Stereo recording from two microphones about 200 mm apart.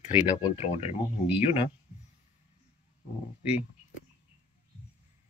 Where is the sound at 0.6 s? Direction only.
35° left (ahead or behind).